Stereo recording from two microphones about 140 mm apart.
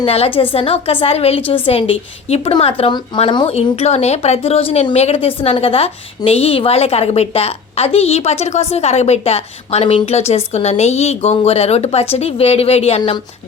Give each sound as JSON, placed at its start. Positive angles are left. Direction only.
{"t": 0.0, "sound": "a woman's voice", "side_deg": 45}
{"t": 3.5, "sound": "a woman's voice", "side_deg": 50}